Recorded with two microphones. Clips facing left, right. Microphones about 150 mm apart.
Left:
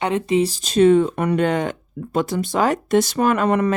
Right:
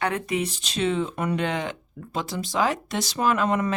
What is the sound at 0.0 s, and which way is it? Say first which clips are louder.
Speech: left 7 dB; 25° left (ahead or behind).